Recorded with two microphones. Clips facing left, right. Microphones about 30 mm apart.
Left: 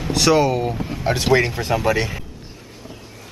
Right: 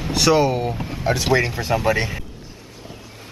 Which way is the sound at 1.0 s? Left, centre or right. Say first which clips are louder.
Left 1 dB; centre.